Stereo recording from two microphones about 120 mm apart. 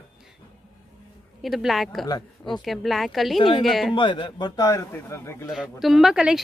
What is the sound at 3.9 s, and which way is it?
Speech, 40° left (ahead or behind).